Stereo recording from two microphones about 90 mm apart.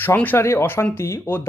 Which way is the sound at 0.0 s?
20° left (ahead or behind).